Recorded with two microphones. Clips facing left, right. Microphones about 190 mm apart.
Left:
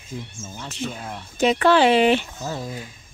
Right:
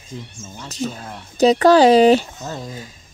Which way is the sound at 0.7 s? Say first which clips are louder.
Right 4 dB; 40° right (ahead or behind).